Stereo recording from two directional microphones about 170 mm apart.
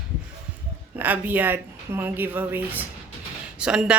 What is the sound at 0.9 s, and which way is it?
A woman's voice, 10° right (ahead or behind).